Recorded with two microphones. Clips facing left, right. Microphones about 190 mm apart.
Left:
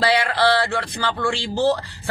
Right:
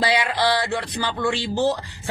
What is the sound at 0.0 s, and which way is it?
A man's voice, 15° right (ahead or behind).